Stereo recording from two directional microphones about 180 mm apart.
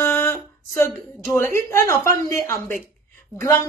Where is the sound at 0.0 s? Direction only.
15° left (ahead or behind).